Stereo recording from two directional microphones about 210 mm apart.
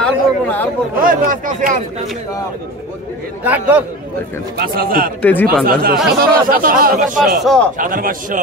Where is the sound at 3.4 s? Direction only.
10° right (ahead or behind).